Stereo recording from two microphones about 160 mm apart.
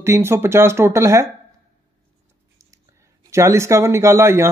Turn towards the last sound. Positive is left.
turn(degrees=-15)  # may be behind; listen again after turning